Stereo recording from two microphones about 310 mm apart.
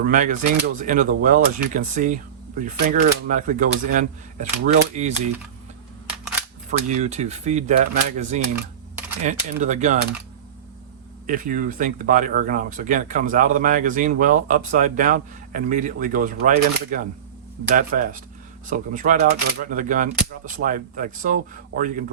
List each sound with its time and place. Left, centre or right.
0.0 s speech: right
6.7 s speech: right
11.3 s speech: right